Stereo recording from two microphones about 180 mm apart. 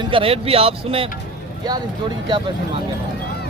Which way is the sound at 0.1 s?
30° right (ahead or behind).